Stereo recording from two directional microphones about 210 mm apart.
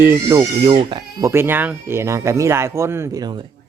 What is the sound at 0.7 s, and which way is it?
Speech, 25° right (ahead or behind).